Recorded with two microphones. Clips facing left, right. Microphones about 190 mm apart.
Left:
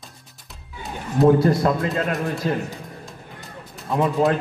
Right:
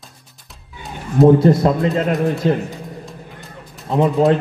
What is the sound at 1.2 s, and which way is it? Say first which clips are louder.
A man's voice: right 5 dB; 25° right (ahead or behind).